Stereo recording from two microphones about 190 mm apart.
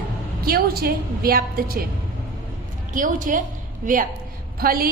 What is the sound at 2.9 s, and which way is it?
A woman's voice, 45° right (ahead or behind).